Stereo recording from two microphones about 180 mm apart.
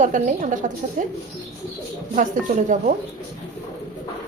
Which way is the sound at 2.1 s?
45° right (ahead or behind).